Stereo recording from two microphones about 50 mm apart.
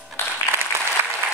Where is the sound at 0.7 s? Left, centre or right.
Right.